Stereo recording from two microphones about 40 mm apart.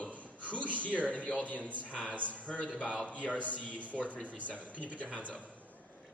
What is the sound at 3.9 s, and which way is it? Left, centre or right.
Mantra, centre.